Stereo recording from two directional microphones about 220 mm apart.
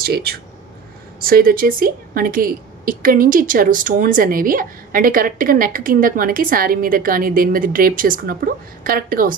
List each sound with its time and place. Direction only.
0.0 s a woman's voice: 45° right (ahead or behind)